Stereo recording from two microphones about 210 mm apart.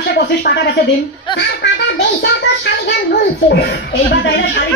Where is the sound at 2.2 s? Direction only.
50° left (ahead or behind).